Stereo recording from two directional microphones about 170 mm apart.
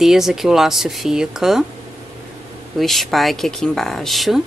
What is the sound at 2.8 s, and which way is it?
Speech, centre (ahead or behind).